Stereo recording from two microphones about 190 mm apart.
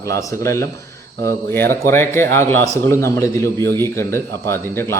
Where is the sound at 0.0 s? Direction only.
15° left (ahead or behind).